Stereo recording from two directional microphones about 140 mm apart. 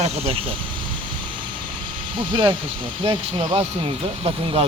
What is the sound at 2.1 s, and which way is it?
Speech, 35° right (ahead or behind).